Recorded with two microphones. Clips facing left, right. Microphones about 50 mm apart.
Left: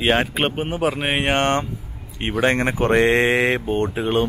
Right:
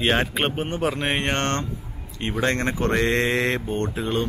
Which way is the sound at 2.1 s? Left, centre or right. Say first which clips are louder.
Left 4 dB; left.